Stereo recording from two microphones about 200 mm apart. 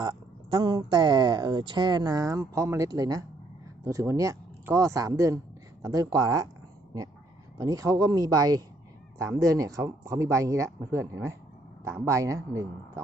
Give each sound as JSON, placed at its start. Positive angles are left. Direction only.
{"t": 0.0, "sound": "speech", "side_deg": -20}
{"t": 7.6, "sound": "speech", "side_deg": -15}